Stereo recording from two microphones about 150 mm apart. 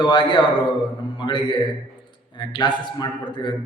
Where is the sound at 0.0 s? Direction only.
30° left (ahead or behind).